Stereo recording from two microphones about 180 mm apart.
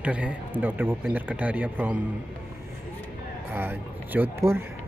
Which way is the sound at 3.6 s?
10° right (ahead or behind).